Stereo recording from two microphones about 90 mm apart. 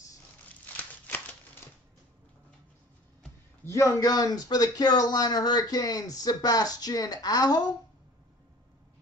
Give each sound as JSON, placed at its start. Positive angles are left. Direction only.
{"t": 3.6, "sound": "speech", "side_deg": 35}